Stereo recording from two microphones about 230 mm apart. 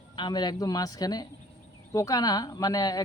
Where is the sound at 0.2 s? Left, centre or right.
Centre.